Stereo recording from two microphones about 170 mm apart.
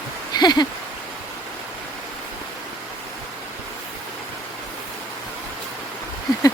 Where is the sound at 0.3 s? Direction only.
25° left (ahead or behind).